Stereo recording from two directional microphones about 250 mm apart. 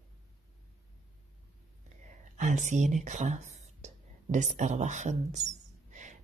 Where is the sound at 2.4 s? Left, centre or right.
Right.